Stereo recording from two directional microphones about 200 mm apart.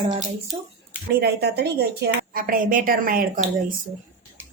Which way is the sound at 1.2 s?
55° right (ahead or behind).